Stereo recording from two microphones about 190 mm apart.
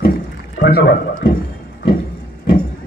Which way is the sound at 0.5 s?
60° left (ahead or behind).